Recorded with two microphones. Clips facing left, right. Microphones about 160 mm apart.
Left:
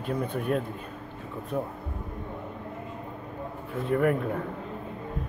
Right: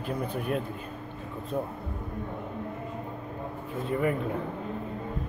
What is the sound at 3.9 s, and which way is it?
Speech, 65° left (ahead or behind).